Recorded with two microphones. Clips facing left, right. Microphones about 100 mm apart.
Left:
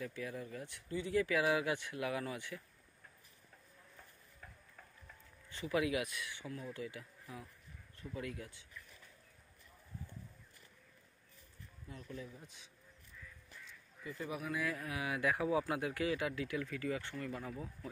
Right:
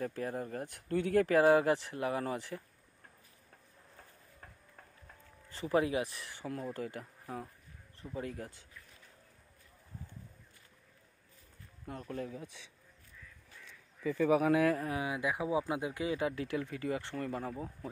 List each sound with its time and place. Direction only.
0.0 s speech: 45° right (ahead or behind)
1.2 s speech: 45° right (ahead or behind)
5.5 s speech: 35° right (ahead or behind)
8.0 s speech: 35° right (ahead or behind)
11.8 s speech: 60° right (ahead or behind); by 12.6 s 80° right
14.0 s speech: 90° right
14.8 s speech: 35° right (ahead or behind)
15.0 s speech: 20° right (ahead or behind); by 17.6 s 40° right (ahead or behind)